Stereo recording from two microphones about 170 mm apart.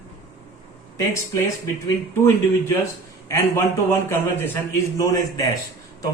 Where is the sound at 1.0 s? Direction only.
20° left (ahead or behind).